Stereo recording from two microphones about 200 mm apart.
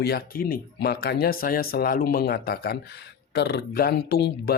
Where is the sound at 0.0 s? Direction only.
50° left (ahead or behind).